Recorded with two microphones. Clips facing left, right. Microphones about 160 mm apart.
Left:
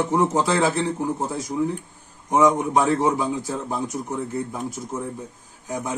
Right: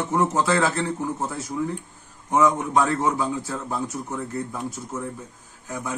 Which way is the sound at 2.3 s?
15° left (ahead or behind).